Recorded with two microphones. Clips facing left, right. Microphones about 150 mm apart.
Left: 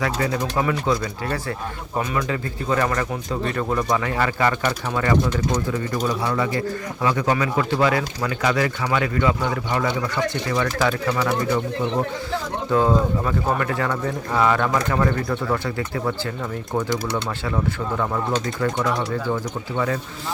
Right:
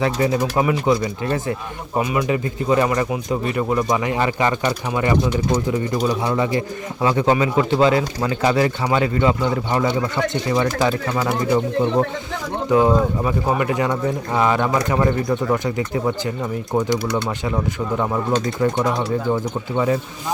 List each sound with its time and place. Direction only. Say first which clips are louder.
0.0 s a man's voice: right 4 dB; 20° right (ahead or behind)
12.7 s a man's voice: right 3 dB; 15° right (ahead or behind)
18.6 s a man's voice: right 2 dB; 20° right (ahead or behind)